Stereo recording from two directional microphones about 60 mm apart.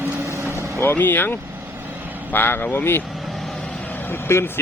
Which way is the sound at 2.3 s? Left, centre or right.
Left.